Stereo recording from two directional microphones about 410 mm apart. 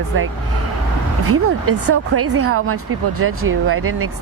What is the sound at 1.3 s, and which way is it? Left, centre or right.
A woman's voice, right.